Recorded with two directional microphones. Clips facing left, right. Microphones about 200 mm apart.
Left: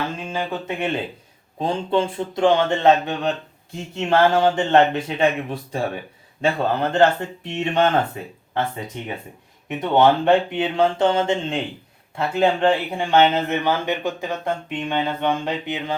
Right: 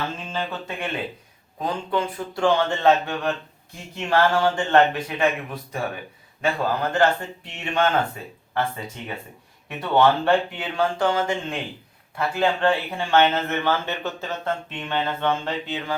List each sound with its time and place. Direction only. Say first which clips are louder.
0.3 s speech: left 3 dB; 10° left (ahead or behind)
1.5 s speech: left 4 dB; 30° left (ahead or behind)